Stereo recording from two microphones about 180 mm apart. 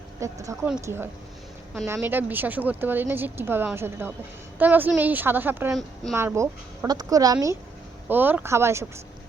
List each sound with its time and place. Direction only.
0.2 s speech: 15° right (ahead or behind)